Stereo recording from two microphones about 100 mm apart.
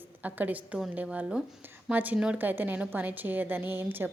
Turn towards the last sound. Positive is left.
turn(degrees=-20)  # may be behind; listen again after turning